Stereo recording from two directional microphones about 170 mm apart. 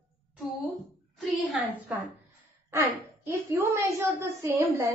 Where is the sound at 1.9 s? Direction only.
10° right (ahead or behind).